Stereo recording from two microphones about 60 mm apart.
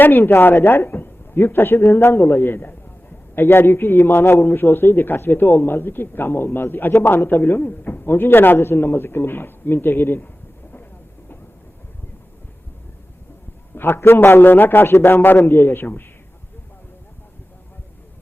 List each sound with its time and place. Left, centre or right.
0.0 s a man's voice: left
13.7 s a man's voice: left